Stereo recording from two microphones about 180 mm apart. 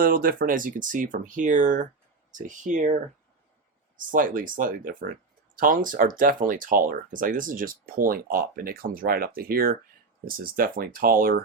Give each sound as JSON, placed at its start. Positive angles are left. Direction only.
{"t": 0.0, "sound": "speech", "side_deg": -55}
{"t": 3.9, "sound": "speech", "side_deg": -50}